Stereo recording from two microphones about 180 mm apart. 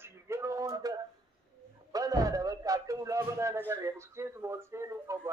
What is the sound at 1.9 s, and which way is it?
Speech, 20° right (ahead or behind).